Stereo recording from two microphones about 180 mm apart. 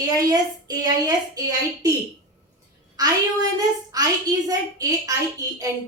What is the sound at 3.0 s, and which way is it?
A woman's voice, 20° right (ahead or behind).